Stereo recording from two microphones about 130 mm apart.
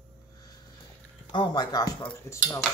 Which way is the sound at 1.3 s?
35° left (ahead or behind).